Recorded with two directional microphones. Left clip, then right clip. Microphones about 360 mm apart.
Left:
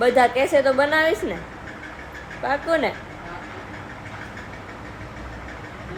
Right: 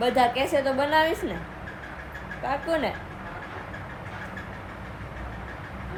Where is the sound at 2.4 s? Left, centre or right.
Centre.